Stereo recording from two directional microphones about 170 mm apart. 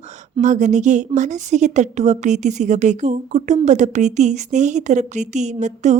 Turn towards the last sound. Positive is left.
turn(degrees=-45)  # may be behind; listen again after turning